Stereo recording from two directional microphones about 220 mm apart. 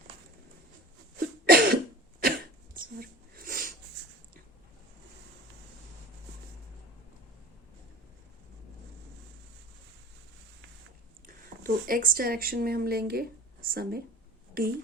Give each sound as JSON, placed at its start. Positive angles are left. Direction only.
{"t": 1.5, "sound": "cough", "side_deg": -40}
{"t": 2.7, "sound": "a sound", "side_deg": -40}
{"t": 11.6, "sound": "a woman's voice", "side_deg": -40}